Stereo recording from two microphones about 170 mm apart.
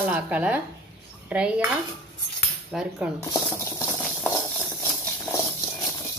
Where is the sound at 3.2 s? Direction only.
15° left (ahead or behind).